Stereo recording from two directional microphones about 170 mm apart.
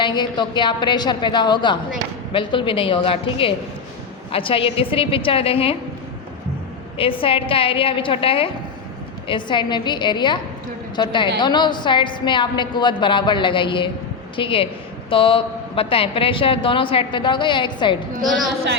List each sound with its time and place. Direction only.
0.0 s a woman's voice: 25° left (ahead or behind)
7.0 s a woman's voice: 30° left (ahead or behind)
18.3 s a woman's voice: centre (ahead or behind)